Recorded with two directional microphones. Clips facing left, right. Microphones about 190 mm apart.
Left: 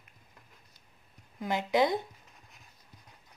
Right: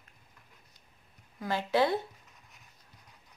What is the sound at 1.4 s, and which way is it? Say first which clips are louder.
Speech: left 1 dB; 15° left (ahead or behind).